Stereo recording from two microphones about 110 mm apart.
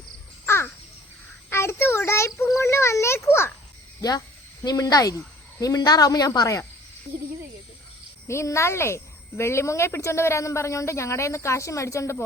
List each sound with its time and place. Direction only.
0.4 s crow: 20° left (ahead or behind)
1.5 s child singing: 25° left (ahead or behind)
4.6 s speech: 35° left (ahead or behind)
8.3 s speech: 25° left (ahead or behind)